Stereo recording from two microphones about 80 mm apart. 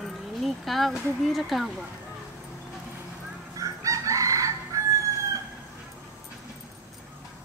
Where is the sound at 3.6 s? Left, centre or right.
Right.